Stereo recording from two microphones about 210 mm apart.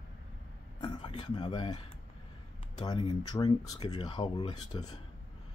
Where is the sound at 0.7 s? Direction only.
20° left (ahead or behind).